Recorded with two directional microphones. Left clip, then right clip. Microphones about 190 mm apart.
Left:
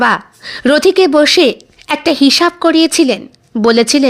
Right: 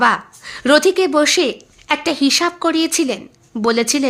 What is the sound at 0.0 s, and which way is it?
Speech, 30° left (ahead or behind).